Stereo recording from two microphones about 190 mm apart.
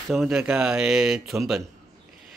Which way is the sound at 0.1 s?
Centre (ahead or behind).